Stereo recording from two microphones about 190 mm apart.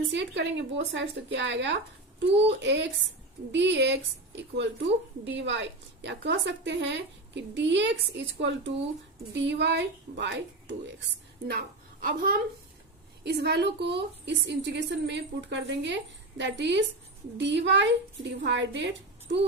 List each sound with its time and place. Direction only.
0.1 s a woman's voice: 65° right (ahead or behind)
12.0 s a woman's voice: 50° right (ahead or behind)
13.2 s a woman's voice: 60° right (ahead or behind)